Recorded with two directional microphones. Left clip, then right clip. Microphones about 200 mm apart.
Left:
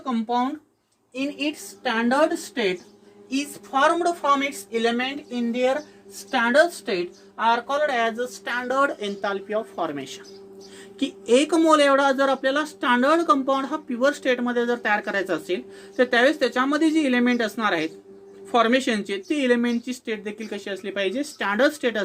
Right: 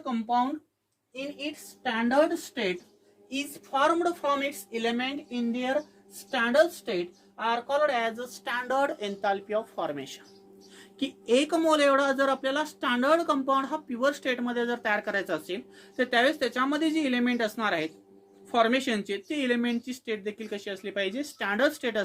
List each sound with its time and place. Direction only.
0.0 s speech: 20° right (ahead or behind)
1.1 s a woman's voice: 5° right (ahead or behind)
11.0 s speech: centre (ahead or behind)